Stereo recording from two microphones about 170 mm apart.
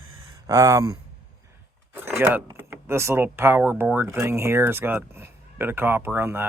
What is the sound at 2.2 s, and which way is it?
Speech, 10° right (ahead or behind).